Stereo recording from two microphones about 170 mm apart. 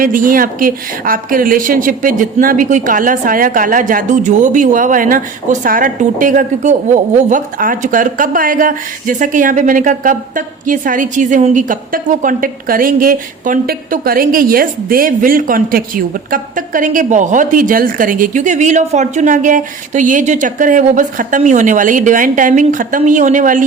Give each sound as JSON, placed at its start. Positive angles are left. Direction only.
{"t": 0.0, "sound": "a woman's voice", "side_deg": -55}